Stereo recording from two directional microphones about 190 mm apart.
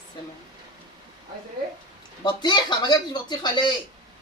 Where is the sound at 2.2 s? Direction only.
25° left (ahead or behind).